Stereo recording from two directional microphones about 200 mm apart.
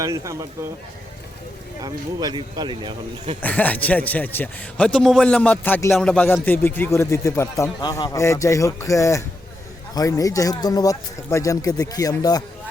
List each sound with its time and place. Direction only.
0.0 s speech: 15° right (ahead or behind)
1.8 s a man's voice: 20° right (ahead or behind)
3.4 s a man's voice: 10° left (ahead or behind)